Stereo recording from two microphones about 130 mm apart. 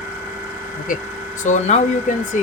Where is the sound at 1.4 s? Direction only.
70° left (ahead or behind).